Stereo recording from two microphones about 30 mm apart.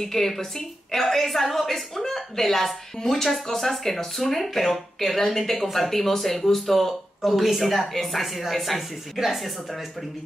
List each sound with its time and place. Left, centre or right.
0.0 s speech: centre
7.8 s speech: centre